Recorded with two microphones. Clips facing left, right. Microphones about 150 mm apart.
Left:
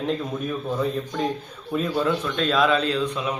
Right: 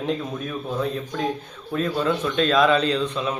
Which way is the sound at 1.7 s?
5° left (ahead or behind).